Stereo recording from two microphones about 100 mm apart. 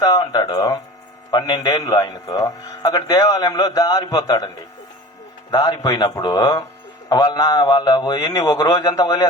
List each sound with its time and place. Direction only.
0.0 s a man's voice: 40° left (ahead or behind)
1.3 s a man's voice: 50° left (ahead or behind)
5.5 s a man's voice: 40° left (ahead or behind)